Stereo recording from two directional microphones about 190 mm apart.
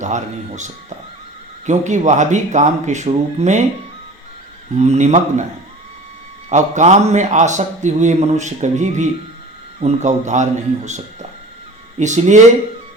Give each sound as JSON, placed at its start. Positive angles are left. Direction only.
{"t": 0.0, "sound": "a man's voice", "side_deg": -40}
{"t": 4.8, "sound": "a man's voice", "side_deg": -35}
{"t": 6.5, "sound": "a man's voice", "side_deg": -35}